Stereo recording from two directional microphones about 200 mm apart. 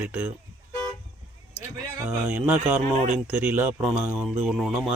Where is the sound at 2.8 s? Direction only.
35° right (ahead or behind).